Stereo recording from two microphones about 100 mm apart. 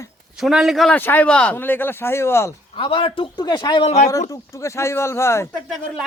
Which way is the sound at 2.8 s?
60° left (ahead or behind).